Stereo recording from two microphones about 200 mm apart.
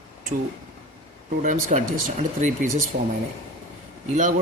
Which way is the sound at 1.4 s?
40° right (ahead or behind).